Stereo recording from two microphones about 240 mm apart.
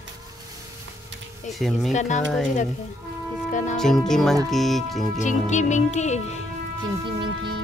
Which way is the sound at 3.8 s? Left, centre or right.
Centre.